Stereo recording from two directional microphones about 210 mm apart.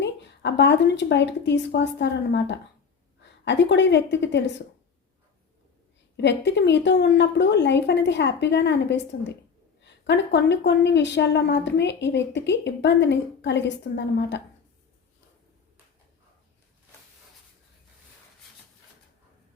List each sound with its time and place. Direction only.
0.0 s speech: 55° left (ahead or behind)
6.1 s speech: 55° left (ahead or behind)